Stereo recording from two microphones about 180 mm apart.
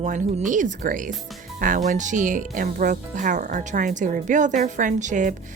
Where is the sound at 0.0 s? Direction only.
45° right (ahead or behind).